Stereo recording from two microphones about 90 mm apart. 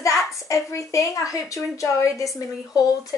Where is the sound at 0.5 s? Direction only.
35° left (ahead or behind).